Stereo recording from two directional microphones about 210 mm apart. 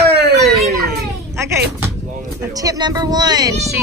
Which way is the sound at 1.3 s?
10° right (ahead or behind).